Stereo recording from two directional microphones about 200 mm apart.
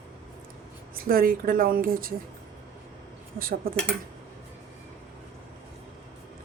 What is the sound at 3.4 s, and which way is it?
Speech, 45° right (ahead or behind).